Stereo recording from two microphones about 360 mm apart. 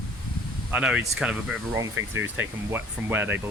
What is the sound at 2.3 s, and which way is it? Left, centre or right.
Speech, centre.